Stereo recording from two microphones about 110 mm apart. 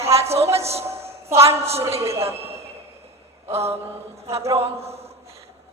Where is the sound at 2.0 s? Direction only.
25° right (ahead or behind).